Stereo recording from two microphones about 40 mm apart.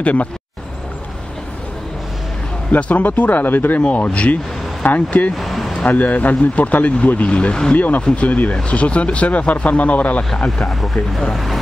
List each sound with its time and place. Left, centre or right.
0.0 s speech: left
2.7 s speech: left
3.8 s speech: left
5.4 s a sound: centre
5.9 s speech: left